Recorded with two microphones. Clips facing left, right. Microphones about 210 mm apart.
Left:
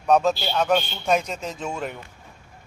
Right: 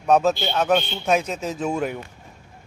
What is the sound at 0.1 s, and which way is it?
A man's voice, 5° right (ahead or behind).